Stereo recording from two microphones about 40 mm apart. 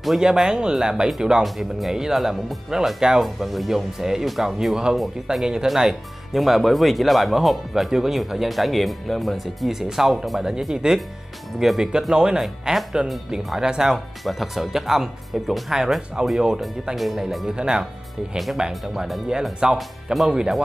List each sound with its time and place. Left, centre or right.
0.2 s speech: centre
1.4 s speech: centre
5.3 s speech: centre
5.7 s speech: centre
9.7 s speech: centre
10.4 s speech: centre
12.1 s speech: right
13.9 s speech: centre
16.9 s speech: centre
17.6 s speech: right
18.7 s speech: centre
19.6 s speech: centre